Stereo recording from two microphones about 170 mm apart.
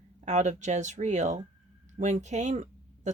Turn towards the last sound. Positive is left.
turn(degrees=-45)  # may be behind; listen again after turning